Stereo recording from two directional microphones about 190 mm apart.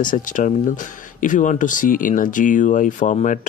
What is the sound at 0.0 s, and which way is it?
Speech, 45° left (ahead or behind).